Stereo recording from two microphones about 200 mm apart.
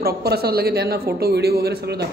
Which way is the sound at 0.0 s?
50° right (ahead or behind).